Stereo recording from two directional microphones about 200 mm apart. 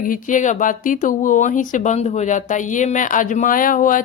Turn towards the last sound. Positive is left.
turn(degrees=40)  # may be behind; listen again after turning